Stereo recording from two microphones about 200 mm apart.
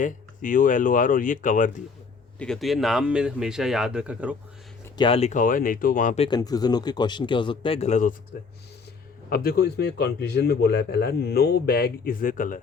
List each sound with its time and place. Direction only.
0.0 s speech: 40° left (ahead or behind)
2.4 s speech: centre (ahead or behind)
4.9 s speech: 25° left (ahead or behind)
6.2 s speech: 20° left (ahead or behind); by 8.1 s 35° left (ahead or behind)
9.3 s speech: 50° left (ahead or behind)